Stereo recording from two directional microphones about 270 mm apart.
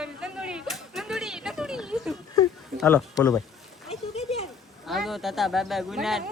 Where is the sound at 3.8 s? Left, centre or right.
Left.